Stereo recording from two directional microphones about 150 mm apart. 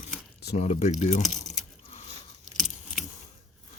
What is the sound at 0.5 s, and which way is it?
Speech, 50° left (ahead or behind).